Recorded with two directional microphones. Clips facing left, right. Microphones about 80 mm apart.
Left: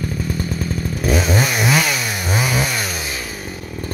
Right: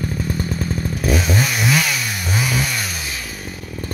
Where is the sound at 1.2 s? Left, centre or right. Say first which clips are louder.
Left 2 dB; centre.